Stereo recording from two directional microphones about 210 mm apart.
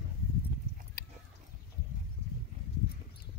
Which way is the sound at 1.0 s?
45° left (ahead or behind).